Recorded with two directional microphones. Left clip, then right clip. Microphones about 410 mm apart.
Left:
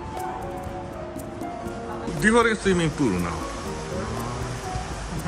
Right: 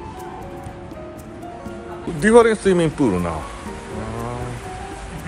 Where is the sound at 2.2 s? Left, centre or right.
Centre.